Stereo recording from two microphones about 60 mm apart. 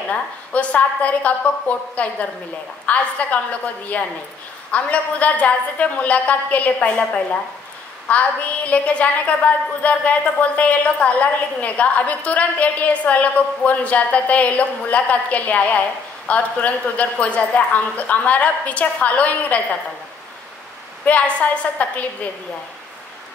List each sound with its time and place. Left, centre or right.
0.1 s a woman's voice: left
21.0 s a woman's voice: left